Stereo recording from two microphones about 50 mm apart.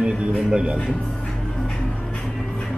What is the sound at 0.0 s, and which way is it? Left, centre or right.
Speech, centre.